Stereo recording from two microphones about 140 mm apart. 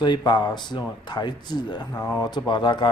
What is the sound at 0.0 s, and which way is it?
Speech, 30° left (ahead or behind).